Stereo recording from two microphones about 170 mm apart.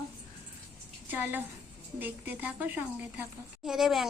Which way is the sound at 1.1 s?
10° right (ahead or behind).